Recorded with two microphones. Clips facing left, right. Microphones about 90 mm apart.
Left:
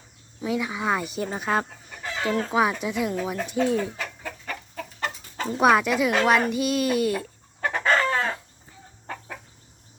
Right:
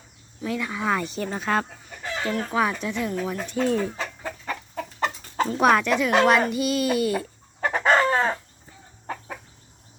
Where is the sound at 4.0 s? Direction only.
30° right (ahead or behind).